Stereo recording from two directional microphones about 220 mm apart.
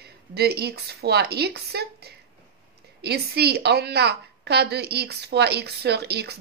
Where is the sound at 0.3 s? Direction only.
45° right (ahead or behind).